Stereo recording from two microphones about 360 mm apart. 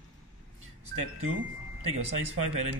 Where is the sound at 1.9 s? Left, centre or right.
Centre.